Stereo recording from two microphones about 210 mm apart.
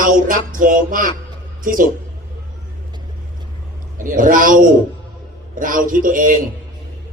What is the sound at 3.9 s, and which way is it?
Speech, 40° right (ahead or behind).